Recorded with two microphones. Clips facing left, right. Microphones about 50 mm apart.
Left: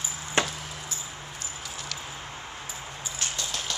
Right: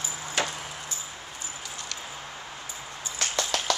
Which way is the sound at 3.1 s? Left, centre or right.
Right.